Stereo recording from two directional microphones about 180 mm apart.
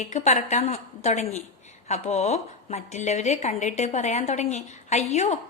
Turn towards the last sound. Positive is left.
turn(degrees=40)  # may be behind; listen again after turning